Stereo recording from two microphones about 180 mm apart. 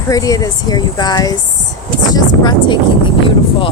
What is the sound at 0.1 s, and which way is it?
Speech, 20° left (ahead or behind).